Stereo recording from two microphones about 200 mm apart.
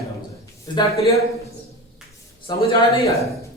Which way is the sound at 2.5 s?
20° left (ahead or behind).